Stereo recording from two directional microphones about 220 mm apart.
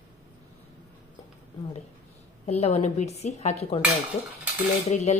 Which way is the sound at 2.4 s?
30° left (ahead or behind).